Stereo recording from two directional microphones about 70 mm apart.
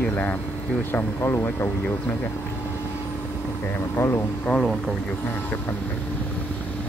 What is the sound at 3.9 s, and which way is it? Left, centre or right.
Speech, left.